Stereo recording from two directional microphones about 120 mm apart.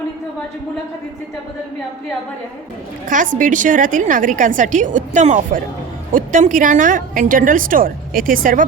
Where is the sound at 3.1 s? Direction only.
90° right.